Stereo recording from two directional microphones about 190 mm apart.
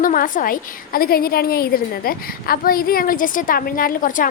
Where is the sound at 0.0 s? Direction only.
45° left (ahead or behind).